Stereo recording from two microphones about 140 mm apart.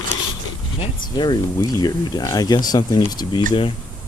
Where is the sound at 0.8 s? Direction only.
30° left (ahead or behind).